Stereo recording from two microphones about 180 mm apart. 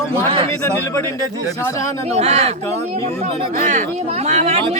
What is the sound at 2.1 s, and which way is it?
Speech, 35° right (ahead or behind).